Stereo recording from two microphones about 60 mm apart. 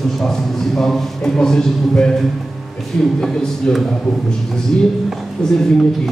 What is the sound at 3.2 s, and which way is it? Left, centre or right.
A man's voice, centre.